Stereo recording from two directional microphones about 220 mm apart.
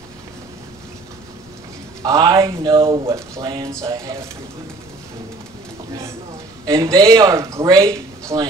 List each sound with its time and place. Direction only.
2.0 s speech: 15° right (ahead or behind)
6.6 s speech: 15° right (ahead or behind)